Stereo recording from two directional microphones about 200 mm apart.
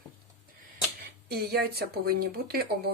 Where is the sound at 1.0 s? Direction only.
55° right (ahead or behind).